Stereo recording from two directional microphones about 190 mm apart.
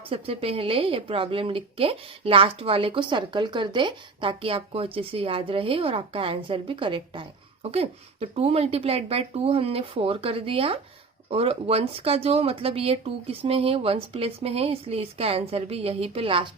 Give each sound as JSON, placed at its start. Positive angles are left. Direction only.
{"t": 0.1, "sound": "speech", "side_deg": -30}